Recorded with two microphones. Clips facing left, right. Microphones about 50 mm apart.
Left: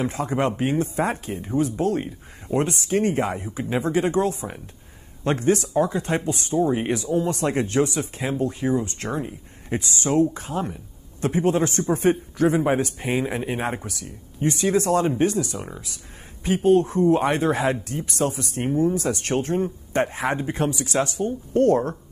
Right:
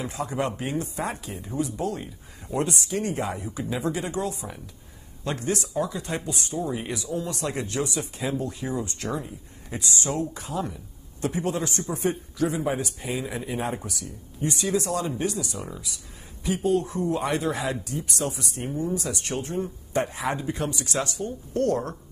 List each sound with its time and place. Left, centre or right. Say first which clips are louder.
0.0 s speech: left 5 dB; left